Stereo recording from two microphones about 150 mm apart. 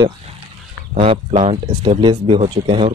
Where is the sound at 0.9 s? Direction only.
45° right (ahead or behind).